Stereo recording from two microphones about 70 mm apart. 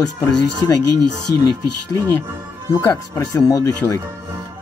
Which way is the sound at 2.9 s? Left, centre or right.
Left.